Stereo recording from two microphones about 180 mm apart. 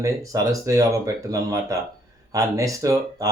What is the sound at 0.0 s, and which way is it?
Speech, 20° right (ahead or behind).